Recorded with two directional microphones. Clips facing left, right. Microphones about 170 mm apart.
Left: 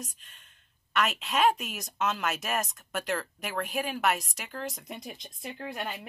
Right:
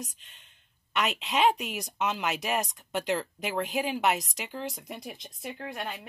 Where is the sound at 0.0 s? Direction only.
20° right (ahead or behind).